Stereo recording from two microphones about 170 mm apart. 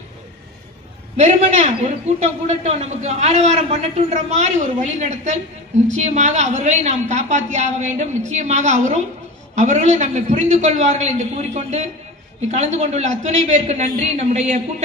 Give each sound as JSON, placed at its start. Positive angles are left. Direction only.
{"t": 1.1, "sound": "a man's voice", "side_deg": -40}